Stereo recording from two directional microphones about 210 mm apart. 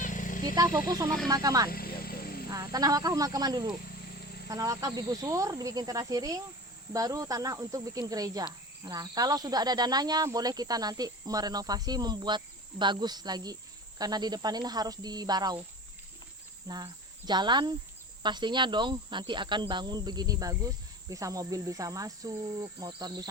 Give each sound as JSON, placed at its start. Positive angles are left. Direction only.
{"t": 0.0, "sound": "a sound", "side_deg": 40}
{"t": 0.4, "sound": "speech", "side_deg": -15}
{"t": 1.7, "sound": "vehicle", "side_deg": 45}
{"t": 2.5, "sound": "speech", "side_deg": -15}
{"t": 16.6, "sound": "speech", "side_deg": -20}